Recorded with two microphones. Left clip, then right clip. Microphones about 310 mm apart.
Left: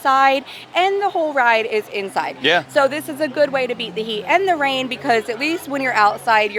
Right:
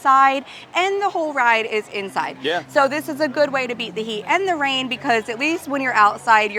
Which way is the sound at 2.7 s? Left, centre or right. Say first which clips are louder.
Left 1 dB; centre.